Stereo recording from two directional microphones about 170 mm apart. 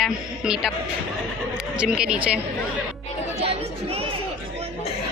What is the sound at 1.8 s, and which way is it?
Speech, 5° right (ahead or behind).